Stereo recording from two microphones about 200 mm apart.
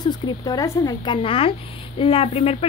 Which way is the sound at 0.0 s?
20° left (ahead or behind).